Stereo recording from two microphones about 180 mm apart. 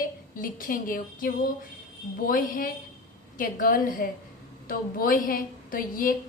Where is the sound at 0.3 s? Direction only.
50° left (ahead or behind).